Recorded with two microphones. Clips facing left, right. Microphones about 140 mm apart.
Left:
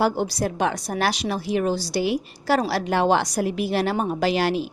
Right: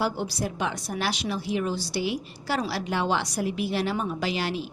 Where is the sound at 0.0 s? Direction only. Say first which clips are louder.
Left 6 dB; 45° left (ahead or behind).